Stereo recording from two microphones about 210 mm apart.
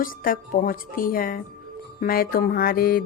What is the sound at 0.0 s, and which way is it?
Speech, 40° left (ahead or behind).